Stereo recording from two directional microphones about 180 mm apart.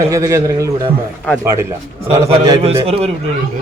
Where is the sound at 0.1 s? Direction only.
15° right (ahead or behind).